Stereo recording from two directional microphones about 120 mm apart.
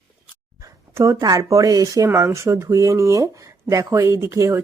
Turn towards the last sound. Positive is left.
turn(degrees=-25)  # may be behind; listen again after turning